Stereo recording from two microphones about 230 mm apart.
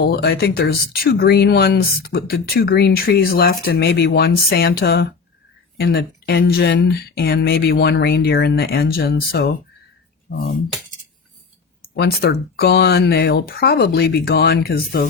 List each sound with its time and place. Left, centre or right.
0.0 s speech: left
11.8 s speech: left